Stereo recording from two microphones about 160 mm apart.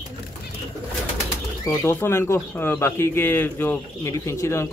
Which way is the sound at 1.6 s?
15° left (ahead or behind).